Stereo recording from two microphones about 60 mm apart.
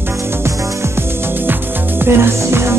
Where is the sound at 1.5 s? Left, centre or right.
Right.